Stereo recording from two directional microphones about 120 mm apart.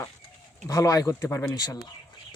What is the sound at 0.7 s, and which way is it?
Speech, 30° left (ahead or behind).